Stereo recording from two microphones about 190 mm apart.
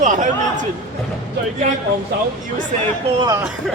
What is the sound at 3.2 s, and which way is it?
Speech, 15° right (ahead or behind).